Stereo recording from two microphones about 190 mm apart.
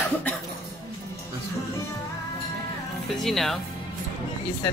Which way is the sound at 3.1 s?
Centre (ahead or behind).